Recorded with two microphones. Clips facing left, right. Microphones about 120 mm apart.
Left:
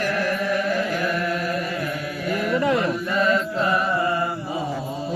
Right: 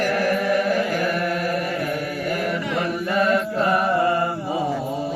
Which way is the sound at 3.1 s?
55° right (ahead or behind).